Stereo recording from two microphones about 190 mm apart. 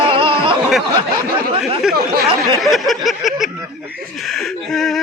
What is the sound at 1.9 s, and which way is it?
Speech, 55° right (ahead or behind).